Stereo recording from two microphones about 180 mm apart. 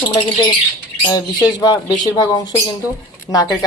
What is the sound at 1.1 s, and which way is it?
Speech, 25° left (ahead or behind).